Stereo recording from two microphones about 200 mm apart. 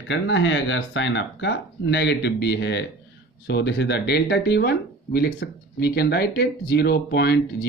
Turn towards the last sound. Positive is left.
turn(degrees=55)  # may be behind; listen again after turning